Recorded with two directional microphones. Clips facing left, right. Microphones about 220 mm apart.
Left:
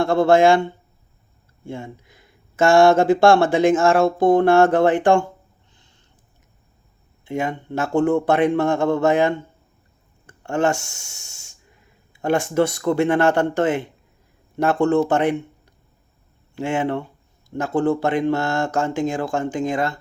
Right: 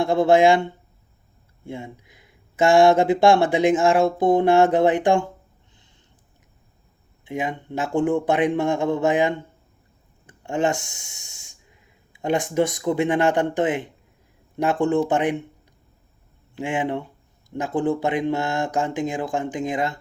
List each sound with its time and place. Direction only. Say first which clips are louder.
0.0 s speech: left 1 dB; 15° right (ahead or behind)
7.3 s speech: left 3 dB; 15° right (ahead or behind)
16.6 s speech: left 3 dB; 15° right (ahead or behind)